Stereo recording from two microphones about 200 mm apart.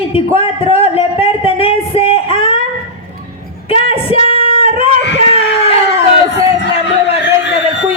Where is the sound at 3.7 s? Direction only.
30° left (ahead or behind).